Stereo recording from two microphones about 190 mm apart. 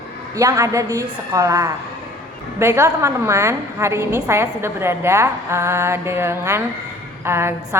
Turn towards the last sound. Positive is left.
turn(degrees=-15)  # may be behind; listen again after turning